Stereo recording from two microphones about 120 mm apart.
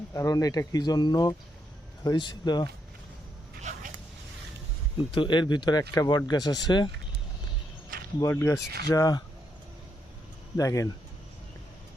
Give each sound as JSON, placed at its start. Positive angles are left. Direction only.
{"t": 0.1, "sound": "speech", "side_deg": 30}
{"t": 3.6, "sound": "dog", "side_deg": -80}
{"t": 5.1, "sound": "speech", "side_deg": 40}
{"t": 8.3, "sound": "speech", "side_deg": 20}
{"t": 10.6, "sound": "speech", "side_deg": 25}